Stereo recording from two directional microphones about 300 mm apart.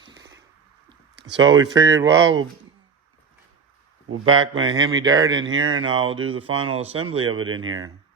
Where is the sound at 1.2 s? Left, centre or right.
Right.